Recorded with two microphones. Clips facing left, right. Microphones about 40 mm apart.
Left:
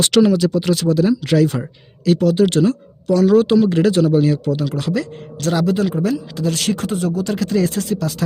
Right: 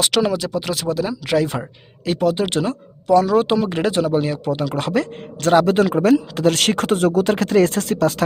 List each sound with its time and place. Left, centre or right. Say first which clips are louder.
0.0 s speech: left 5 dB; centre
2.0 s speech: left 4 dB; centre
4.7 s speech: right 1 dB; right